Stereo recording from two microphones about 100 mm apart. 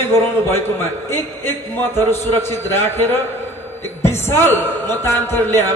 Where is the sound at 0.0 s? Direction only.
25° left (ahead or behind).